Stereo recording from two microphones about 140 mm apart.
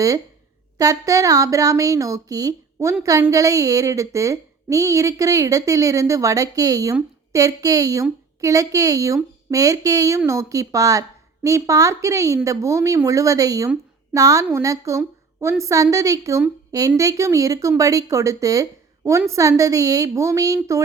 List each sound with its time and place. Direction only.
0.8 s a woman's voice: 25° right (ahead or behind)